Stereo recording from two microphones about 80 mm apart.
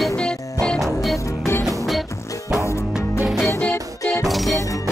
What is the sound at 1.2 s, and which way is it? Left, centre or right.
Music, left.